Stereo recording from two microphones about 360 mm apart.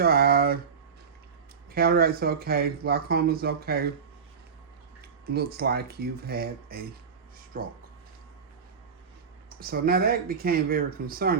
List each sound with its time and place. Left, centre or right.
0.0 s a sound: right
1.7 s speech: right
5.2 s speech: right
9.6 s speech: right